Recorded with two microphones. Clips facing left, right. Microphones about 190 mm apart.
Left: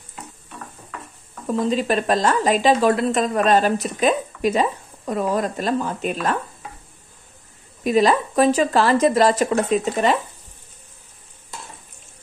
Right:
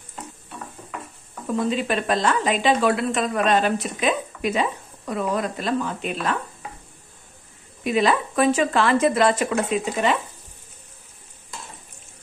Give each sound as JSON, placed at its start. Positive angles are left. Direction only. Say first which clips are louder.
{"t": 1.7, "sound": "a woman's voice", "louder": "left 5 dB", "side_deg": 40}
{"t": 7.8, "sound": "a woman's voice", "louder": "left 3 dB", "side_deg": 40}